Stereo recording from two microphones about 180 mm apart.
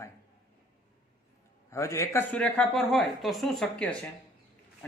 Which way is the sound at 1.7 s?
15° left (ahead or behind).